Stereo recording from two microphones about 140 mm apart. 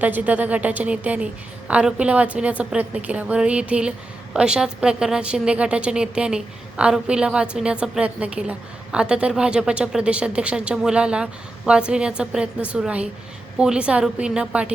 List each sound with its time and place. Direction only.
0.0 s a woman's voice: 10° right (ahead or behind)